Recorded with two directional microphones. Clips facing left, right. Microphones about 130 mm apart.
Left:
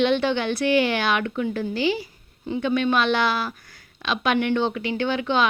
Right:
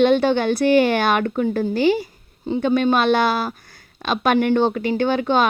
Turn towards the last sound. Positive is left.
turn(degrees=-45)  # may be behind; listen again after turning